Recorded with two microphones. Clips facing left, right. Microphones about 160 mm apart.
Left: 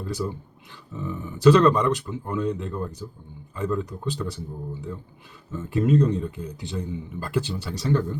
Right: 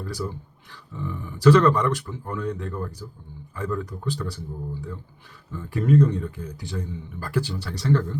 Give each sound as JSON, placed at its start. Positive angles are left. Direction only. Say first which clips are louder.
{"t": 0.0, "sound": "speech", "louder": "left 2 dB", "side_deg": 20}
{"t": 1.4, "sound": "speech", "louder": "left 1 dB", "side_deg": 20}